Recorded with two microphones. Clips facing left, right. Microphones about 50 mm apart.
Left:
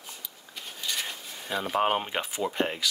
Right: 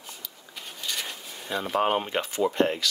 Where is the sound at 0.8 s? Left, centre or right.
Centre.